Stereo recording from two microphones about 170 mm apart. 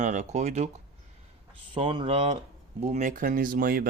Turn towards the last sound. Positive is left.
turn(degrees=-60)  # may be behind; listen again after turning